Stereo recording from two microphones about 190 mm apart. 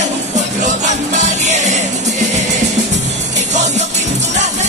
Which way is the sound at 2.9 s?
35° right (ahead or behind).